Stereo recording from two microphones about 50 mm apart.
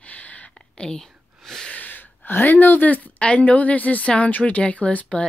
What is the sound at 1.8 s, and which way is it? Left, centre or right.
Speech, left.